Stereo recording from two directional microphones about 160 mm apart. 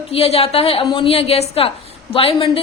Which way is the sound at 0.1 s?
40° left (ahead or behind).